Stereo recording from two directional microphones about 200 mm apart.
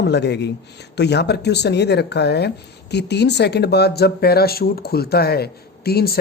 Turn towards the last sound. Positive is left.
turn(degrees=50)  # may be behind; listen again after turning